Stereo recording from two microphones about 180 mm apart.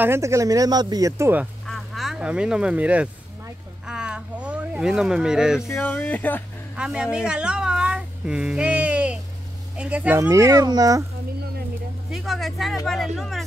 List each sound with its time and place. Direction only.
0.0 s speech: 15° right (ahead or behind)
1.7 s a sound: centre (ahead or behind)
5.6 s speech: 15° left (ahead or behind)
6.8 s a sound: 5° right (ahead or behind)
9.8 s speech: 5° right (ahead or behind)
12.1 s speech: centre (ahead or behind)